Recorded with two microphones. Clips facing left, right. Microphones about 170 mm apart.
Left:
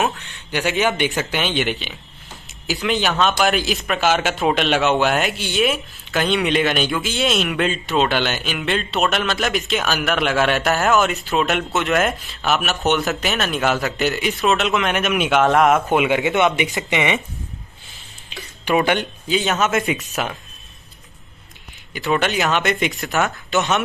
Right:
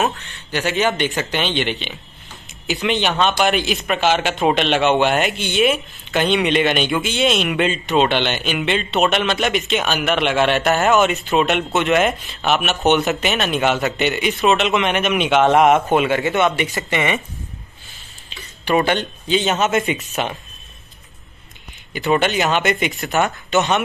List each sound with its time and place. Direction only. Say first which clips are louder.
0.2 s speech: even; 10° left (ahead or behind)
16.3 s speech: even; 15° left (ahead or behind)
18.7 s speech: right 1 dB; 10° left (ahead or behind)
21.9 s speech: right 2 dB; centre (ahead or behind)